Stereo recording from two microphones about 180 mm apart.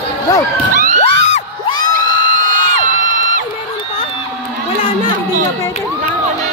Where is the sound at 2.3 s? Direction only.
45° right (ahead or behind).